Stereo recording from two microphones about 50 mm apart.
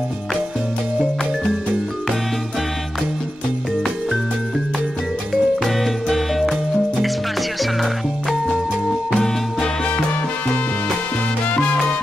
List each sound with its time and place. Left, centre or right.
5.3 s music: centre
9.1 s music: centre
11.4 s salsa music: left